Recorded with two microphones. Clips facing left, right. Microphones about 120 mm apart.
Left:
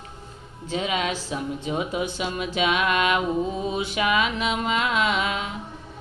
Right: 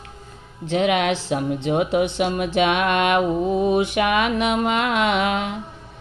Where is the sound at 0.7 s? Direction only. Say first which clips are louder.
Right 7 dB; 70° right (ahead or behind).